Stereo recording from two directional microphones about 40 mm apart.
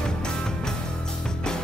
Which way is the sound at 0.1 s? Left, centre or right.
Centre.